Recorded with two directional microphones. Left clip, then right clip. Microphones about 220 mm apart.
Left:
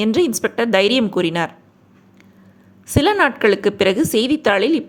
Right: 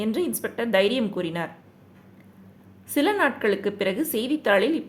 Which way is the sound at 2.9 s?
25° left (ahead or behind).